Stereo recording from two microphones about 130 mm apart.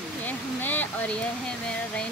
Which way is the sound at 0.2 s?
15° left (ahead or behind).